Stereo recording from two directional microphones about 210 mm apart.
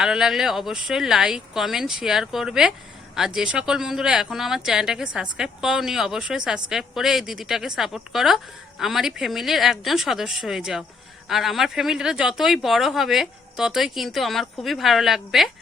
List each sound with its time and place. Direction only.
0.0 s a woman's voice: centre (ahead or behind)